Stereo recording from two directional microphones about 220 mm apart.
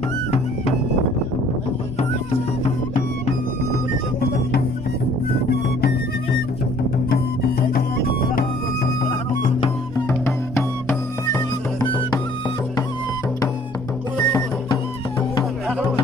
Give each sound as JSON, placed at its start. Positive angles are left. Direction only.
{"t": 9.9, "sound": "music", "side_deg": 10}
{"t": 14.1, "sound": "music", "side_deg": 15}